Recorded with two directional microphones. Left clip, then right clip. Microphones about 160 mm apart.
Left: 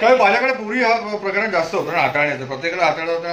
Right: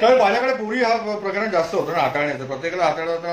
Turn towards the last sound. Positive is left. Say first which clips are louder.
# left 2 dB
turn(degrees=-20)  # may be behind; listen again after turning